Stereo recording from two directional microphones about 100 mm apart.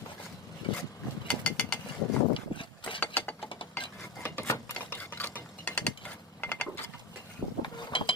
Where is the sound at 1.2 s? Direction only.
15° left (ahead or behind).